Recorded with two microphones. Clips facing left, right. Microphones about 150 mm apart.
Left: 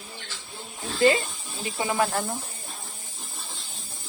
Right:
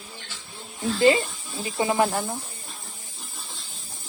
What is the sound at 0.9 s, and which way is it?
Speech, 25° right (ahead or behind).